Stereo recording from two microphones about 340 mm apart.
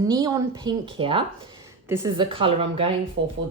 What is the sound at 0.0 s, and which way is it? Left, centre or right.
A woman's voice, centre.